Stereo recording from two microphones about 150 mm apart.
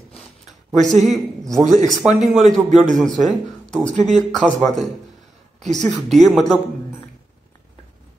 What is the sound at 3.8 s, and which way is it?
Speech, 50° right (ahead or behind).